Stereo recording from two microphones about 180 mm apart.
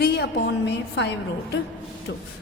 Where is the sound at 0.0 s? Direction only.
65° left (ahead or behind).